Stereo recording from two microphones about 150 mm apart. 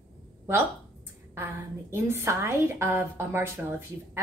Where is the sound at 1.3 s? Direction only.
15° right (ahead or behind).